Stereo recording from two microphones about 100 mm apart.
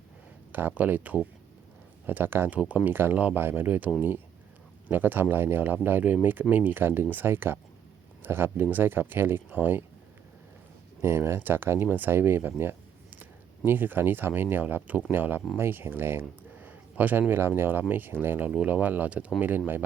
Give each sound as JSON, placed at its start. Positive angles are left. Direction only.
{"t": 0.5, "sound": "speech", "side_deg": -15}
{"t": 11.0, "sound": "speech", "side_deg": -25}